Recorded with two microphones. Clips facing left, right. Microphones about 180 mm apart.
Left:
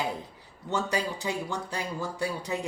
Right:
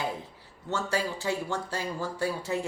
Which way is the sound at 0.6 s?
15° left (ahead or behind).